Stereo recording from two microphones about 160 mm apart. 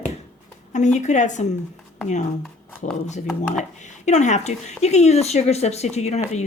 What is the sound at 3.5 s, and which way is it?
Speech, 50° left (ahead or behind).